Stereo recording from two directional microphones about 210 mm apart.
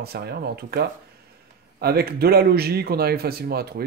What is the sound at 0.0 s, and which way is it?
Speech, 50° right (ahead or behind).